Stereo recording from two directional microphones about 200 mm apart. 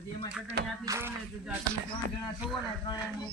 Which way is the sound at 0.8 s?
15° right (ahead or behind).